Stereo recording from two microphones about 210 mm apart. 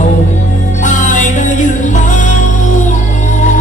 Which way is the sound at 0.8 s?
35° left (ahead or behind).